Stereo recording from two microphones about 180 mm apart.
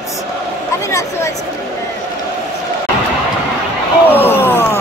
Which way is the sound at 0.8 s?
15° left (ahead or behind).